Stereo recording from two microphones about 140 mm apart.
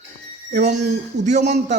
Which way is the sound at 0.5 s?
65° right (ahead or behind).